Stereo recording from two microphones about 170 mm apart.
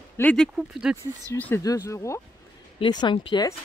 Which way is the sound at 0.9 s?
5° right (ahead or behind).